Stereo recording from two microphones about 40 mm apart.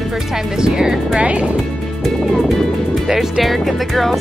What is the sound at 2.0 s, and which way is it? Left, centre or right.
Speech, centre.